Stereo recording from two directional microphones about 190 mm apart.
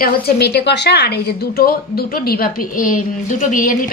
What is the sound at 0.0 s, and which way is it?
A woman's voice, 60° left (ahead or behind).